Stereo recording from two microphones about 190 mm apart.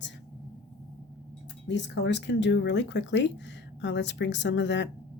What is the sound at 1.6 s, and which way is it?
Speech, 70° left (ahead or behind).